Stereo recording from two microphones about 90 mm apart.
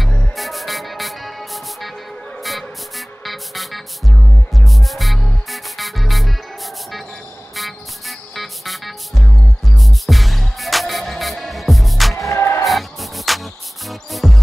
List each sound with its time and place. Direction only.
0.4 s music: centre (ahead or behind)
3.3 s music: centre (ahead or behind)
8.4 s music: centre (ahead or behind)
12.3 s music: 30° left (ahead or behind)
12.6 s music: centre (ahead or behind)